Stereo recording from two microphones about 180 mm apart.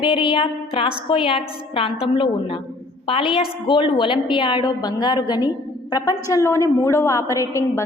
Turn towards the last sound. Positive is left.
turn(degrees=15)  # may be behind; listen again after turning